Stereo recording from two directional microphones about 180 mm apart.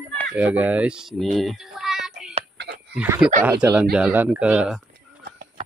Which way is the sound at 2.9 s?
10° right (ahead or behind).